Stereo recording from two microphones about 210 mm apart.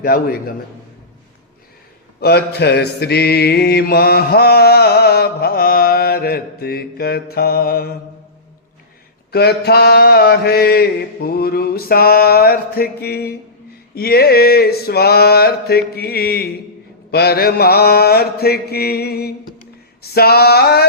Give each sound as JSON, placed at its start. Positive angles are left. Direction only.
{"t": 0.0, "sound": "mantra", "side_deg": 45}
{"t": 2.2, "sound": "mantra", "side_deg": 50}
{"t": 9.3, "sound": "mantra", "side_deg": 50}